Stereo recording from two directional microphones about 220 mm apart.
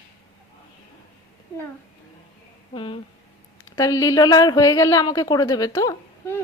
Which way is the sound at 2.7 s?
20° left (ahead or behind).